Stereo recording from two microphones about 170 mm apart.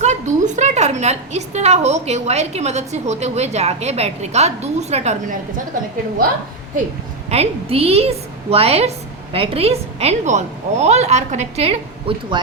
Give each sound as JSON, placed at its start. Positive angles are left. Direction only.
{"t": 0.0, "sound": "a woman's voice", "side_deg": -45}
{"t": 7.3, "sound": "a woman's voice", "side_deg": -35}